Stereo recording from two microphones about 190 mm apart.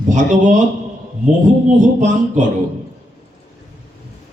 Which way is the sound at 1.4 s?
40° right (ahead or behind).